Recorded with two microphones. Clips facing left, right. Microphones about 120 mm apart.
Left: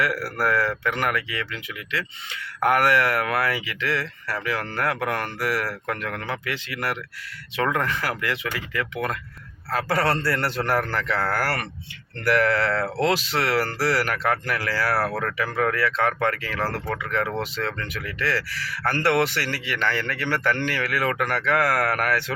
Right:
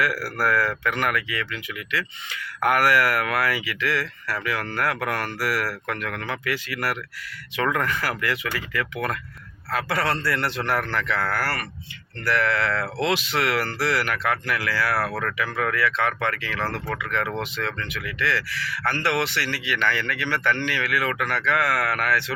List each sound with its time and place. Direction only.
0.0 s speech: 25° left (ahead or behind)
9.7 s speech: 40° left (ahead or behind)